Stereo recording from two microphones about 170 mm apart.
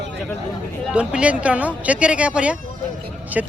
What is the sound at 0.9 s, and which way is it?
Speech, 5° right (ahead or behind).